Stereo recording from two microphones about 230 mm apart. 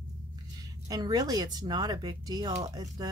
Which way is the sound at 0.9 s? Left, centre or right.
Centre.